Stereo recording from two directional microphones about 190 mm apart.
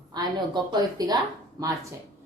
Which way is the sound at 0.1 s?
20° right (ahead or behind).